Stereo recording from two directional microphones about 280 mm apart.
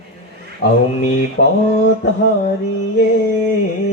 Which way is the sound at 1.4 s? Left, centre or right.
Left.